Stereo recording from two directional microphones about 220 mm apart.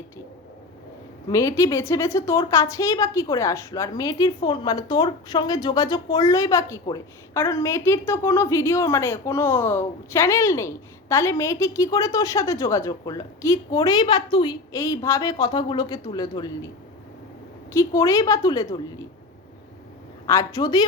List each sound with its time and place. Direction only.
1.3 s a woman's voice: 15° left (ahead or behind)
17.7 s a woman's voice: 15° left (ahead or behind)
20.2 s a woman's voice: 15° left (ahead or behind)